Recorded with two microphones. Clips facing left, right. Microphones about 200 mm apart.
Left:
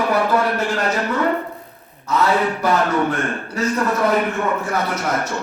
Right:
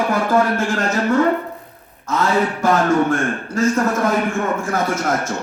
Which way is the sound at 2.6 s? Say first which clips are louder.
Right 2 dB; 45° right (ahead or behind).